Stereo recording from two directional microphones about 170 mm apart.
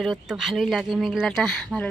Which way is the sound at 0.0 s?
Centre (ahead or behind).